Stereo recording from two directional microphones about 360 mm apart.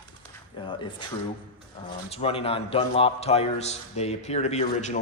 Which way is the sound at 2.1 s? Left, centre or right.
Centre.